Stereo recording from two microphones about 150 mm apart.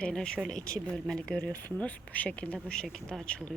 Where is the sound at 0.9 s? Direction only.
5° left (ahead or behind).